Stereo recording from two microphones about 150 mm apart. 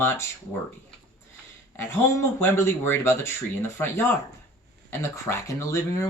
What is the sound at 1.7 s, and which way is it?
Speech, 15° left (ahead or behind).